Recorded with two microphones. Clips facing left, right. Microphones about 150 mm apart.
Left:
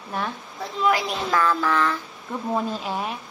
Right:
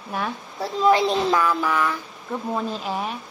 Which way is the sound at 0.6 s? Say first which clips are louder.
Right 5 dB; 30° right (ahead or behind).